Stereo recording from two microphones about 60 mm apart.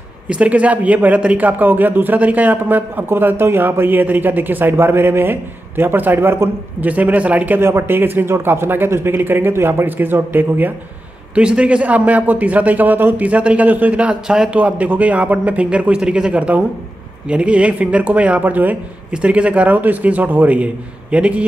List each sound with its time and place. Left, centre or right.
0.3 s speech: right
6.8 s a man's voice: right
7.6 s speech: right
11.3 s a man's voice: centre
14.2 s a man's voice: centre
14.5 s a man's voice: right